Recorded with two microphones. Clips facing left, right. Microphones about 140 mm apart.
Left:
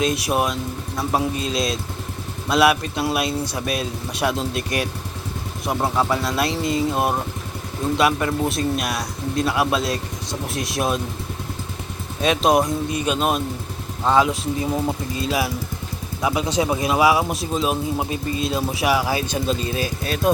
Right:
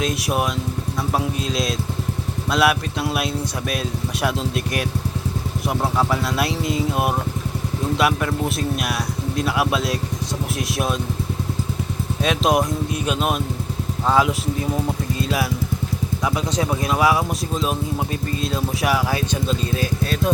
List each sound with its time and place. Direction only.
0.0 s speech: centre (ahead or behind)
12.2 s speech: centre (ahead or behind)